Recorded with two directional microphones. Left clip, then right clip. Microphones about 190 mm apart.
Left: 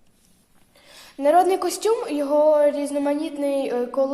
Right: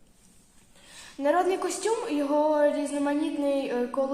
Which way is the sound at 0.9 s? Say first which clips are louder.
Left 7 dB; 50° left (ahead or behind).